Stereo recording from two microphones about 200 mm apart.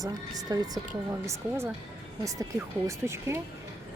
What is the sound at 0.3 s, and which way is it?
A woman's voice, 20° right (ahead or behind).